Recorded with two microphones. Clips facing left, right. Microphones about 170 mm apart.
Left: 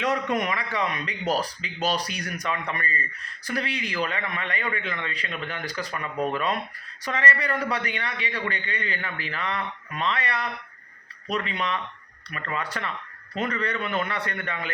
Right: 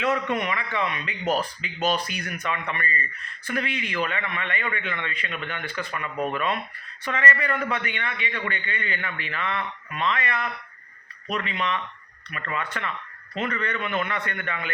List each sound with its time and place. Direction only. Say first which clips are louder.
0.0 s a man's voice: even; 40° left (ahead or behind)